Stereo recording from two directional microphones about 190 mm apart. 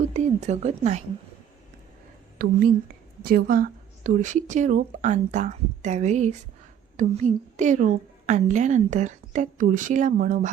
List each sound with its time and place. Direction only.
0.0 s a woman's voice: 35° right (ahead or behind)
2.4 s a woman's voice: 50° right (ahead or behind)